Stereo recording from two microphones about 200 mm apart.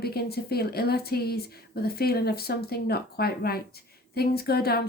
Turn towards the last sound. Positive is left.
turn(degrees=50)  # may be behind; listen again after turning